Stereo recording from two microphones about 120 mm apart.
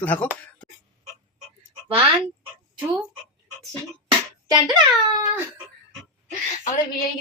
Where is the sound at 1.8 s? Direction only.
50° right (ahead or behind).